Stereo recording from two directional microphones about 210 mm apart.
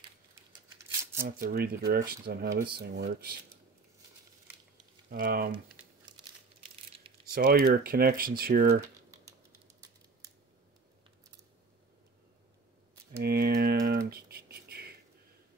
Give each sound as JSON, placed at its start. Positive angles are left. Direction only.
{"t": 1.2, "sound": "speech", "side_deg": -45}
{"t": 5.1, "sound": "speech", "side_deg": -45}
{"t": 7.3, "sound": "speech", "side_deg": -45}
{"t": 13.2, "sound": "typing", "side_deg": -45}
{"t": 14.1, "sound": "a sound", "side_deg": -45}